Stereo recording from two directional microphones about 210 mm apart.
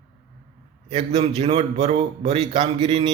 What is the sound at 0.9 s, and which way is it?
A man's voice, 25° right (ahead or behind).